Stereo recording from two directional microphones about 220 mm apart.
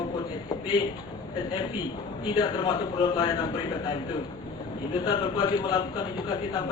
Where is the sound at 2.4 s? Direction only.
20° left (ahead or behind).